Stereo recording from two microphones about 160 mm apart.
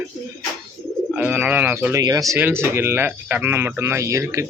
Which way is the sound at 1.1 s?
10° right (ahead or behind).